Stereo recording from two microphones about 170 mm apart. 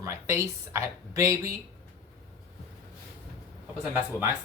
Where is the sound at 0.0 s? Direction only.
15° right (ahead or behind).